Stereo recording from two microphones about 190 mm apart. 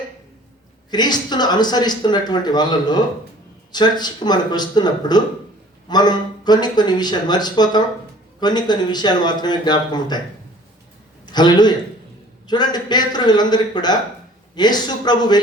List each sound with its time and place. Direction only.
0.9 s speech: 20° left (ahead or behind)
11.3 s speech: 20° left (ahead or behind)